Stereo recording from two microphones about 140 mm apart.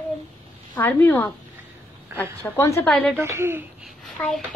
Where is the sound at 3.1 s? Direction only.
20° right (ahead or behind).